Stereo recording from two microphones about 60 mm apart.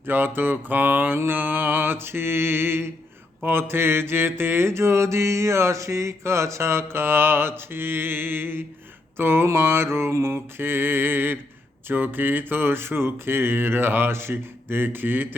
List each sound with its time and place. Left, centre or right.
0.0 s mantra: right